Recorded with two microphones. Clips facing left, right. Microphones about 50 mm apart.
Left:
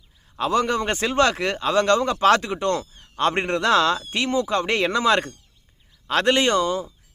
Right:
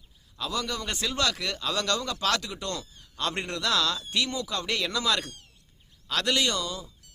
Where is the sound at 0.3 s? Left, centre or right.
Left.